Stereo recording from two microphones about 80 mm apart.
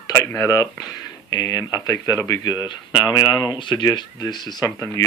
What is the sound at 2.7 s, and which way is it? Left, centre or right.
Speech, left.